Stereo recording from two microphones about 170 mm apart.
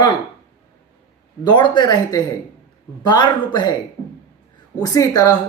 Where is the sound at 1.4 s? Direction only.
25° left (ahead or behind).